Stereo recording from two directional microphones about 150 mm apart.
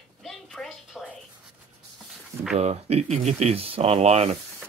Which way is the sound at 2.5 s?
45° right (ahead or behind).